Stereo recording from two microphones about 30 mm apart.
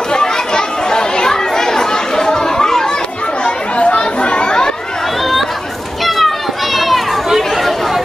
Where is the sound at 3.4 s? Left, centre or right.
Left.